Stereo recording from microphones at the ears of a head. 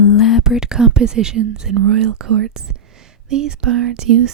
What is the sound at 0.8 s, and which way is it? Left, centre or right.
Speech, right.